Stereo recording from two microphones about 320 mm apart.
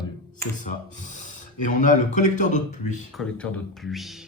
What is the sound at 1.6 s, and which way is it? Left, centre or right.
Speech, left.